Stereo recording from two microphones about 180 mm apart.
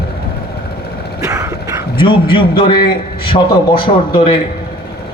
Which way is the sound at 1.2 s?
15° right (ahead or behind).